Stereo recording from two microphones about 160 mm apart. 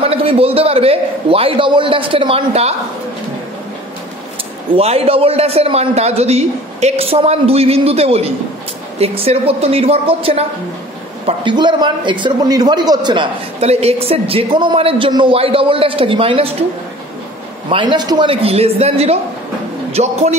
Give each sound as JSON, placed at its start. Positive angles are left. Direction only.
{"t": 0.0, "sound": "a man's voice", "side_deg": -35}
{"t": 4.7, "sound": "a man's voice", "side_deg": -40}
{"t": 17.6, "sound": "a man's voice", "side_deg": -30}